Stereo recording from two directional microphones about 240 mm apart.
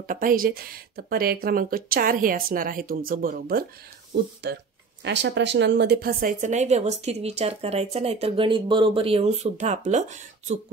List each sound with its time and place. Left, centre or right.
0.0 s speech: right